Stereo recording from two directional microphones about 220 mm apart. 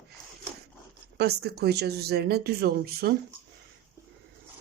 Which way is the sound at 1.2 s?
45° right (ahead or behind).